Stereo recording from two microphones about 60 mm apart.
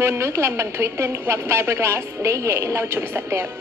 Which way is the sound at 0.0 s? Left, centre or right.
Right.